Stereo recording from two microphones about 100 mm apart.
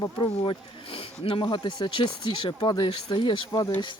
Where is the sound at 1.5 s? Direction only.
50° left (ahead or behind).